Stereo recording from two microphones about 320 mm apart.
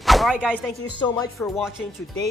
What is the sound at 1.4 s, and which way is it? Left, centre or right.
Speech, centre.